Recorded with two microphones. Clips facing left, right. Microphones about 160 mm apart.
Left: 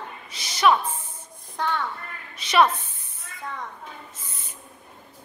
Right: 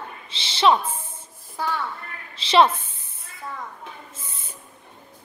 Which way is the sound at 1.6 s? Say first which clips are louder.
Even; 5° right (ahead or behind).